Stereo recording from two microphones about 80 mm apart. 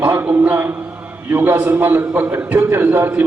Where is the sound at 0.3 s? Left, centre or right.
Right.